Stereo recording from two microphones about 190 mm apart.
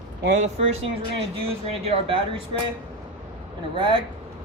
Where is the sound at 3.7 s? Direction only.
25° right (ahead or behind).